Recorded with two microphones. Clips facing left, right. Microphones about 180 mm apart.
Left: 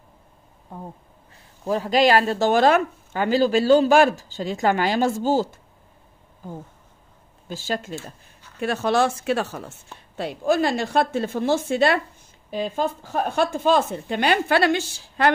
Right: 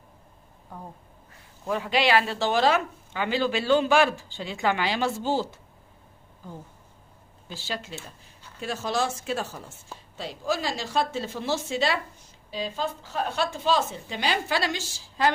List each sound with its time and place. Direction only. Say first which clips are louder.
1.6 s speech: left 6 dB; 35° left (ahead or behind)
7.4 s speech: left 7 dB; 45° left (ahead or behind)
8.5 s speech: left 7 dB; 60° left (ahead or behind)
9.9 s speech: left 7 dB; 60° left (ahead or behind)